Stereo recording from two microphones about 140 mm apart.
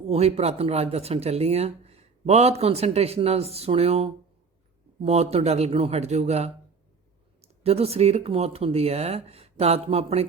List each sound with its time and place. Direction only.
0.1 s speech: 50° right (ahead or behind)